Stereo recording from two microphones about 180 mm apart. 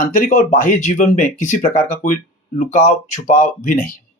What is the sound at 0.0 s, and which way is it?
Speech, 45° left (ahead or behind).